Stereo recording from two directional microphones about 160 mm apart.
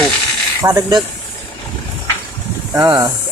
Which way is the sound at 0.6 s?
20° right (ahead or behind).